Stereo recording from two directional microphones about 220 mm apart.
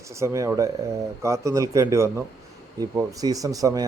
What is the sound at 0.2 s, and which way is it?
Speech, 15° right (ahead or behind).